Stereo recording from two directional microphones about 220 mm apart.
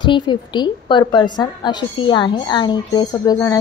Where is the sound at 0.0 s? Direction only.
20° left (ahead or behind).